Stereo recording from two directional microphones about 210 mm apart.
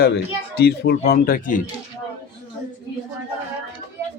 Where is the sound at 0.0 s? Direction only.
50° left (ahead or behind).